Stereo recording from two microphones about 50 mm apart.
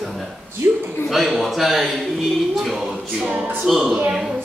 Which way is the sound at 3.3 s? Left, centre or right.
Right.